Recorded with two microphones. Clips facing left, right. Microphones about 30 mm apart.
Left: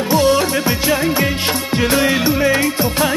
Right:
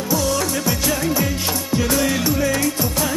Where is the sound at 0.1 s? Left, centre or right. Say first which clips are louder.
Left 7 dB; left.